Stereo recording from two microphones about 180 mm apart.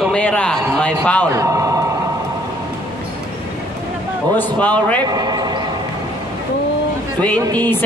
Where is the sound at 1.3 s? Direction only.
15° right (ahead or behind).